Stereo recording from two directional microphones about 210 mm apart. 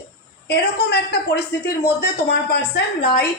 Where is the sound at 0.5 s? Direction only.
50° left (ahead or behind).